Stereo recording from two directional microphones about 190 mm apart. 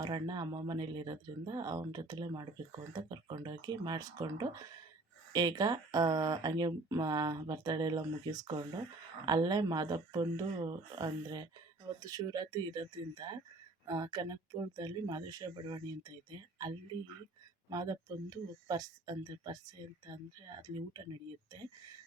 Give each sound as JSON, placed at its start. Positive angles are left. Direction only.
{"t": 0.0, "sound": "speech", "side_deg": -20}
{"t": 17.7, "sound": "speech", "side_deg": -20}
{"t": 20.6, "sound": "speech", "side_deg": -20}